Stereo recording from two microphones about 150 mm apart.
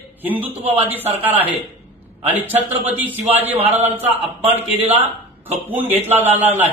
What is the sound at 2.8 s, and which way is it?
Speech, 10° right (ahead or behind).